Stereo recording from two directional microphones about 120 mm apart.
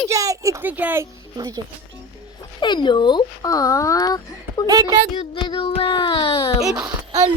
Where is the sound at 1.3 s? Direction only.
35° right (ahead or behind).